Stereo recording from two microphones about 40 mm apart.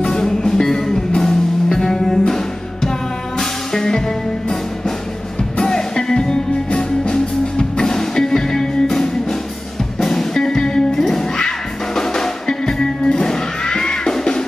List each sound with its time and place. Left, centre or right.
0.0 s music: centre